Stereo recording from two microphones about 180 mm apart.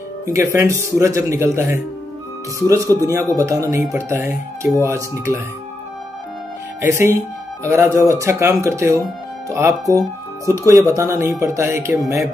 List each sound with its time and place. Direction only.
0.3 s speech: 15° right (ahead or behind)
6.8 s speech: 15° right (ahead or behind)